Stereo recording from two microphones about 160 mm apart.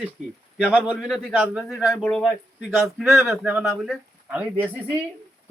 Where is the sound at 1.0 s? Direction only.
Centre (ahead or behind).